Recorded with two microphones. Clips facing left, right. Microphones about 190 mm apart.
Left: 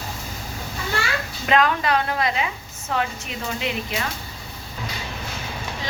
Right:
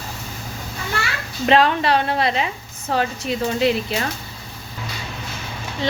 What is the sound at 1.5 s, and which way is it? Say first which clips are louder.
A woman's voice: right 4 dB; 30° right (ahead or behind).